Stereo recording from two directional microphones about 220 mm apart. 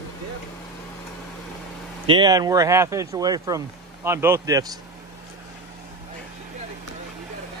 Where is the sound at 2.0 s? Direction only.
20° right (ahead or behind).